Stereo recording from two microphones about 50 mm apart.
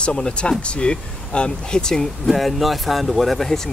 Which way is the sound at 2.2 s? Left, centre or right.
Centre.